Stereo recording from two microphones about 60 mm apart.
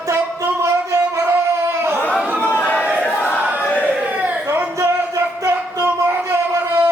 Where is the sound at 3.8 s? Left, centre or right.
Right.